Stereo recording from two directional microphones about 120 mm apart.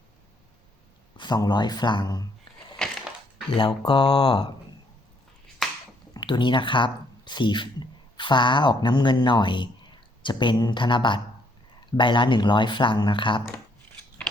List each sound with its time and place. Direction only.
1.1 s speech: 35° left (ahead or behind)
2.8 s crushing: 5° left (ahead or behind)
3.7 s speech: 40° left (ahead or behind)
5.6 s a sound: centre (ahead or behind)
6.1 s speech: 40° left (ahead or behind)